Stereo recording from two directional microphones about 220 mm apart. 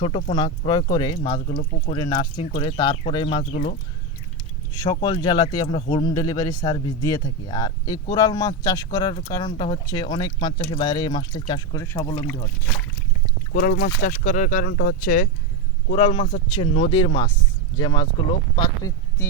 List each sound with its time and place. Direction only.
0.0 s speech: 25° left (ahead or behind)
3.5 s speech: 35° left (ahead or behind)
4.7 s speech: 15° left (ahead or behind)
13.5 s speech: 40° left (ahead or behind)
15.9 s speech: 25° left (ahead or behind)